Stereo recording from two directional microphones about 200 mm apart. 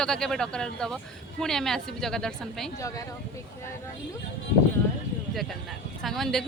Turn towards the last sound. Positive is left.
turn(degrees=0)  # may be behind; listen again after turning